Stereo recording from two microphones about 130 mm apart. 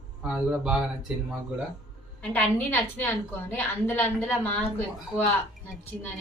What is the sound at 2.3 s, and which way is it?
A woman's voice, 15° left (ahead or behind).